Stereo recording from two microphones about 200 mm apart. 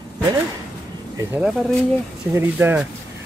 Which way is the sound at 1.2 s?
5° right (ahead or behind).